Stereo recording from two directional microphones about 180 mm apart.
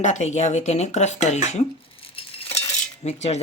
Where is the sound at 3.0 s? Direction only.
40° left (ahead or behind).